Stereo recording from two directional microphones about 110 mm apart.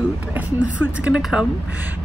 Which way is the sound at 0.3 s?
15° right (ahead or behind).